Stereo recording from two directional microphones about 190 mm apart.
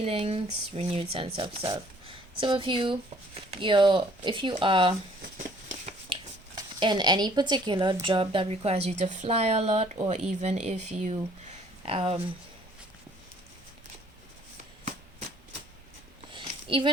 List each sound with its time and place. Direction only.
0.0 s speech: 30° right (ahead or behind)
6.6 s speech: 25° right (ahead or behind)
16.3 s a sound: 25° right (ahead or behind)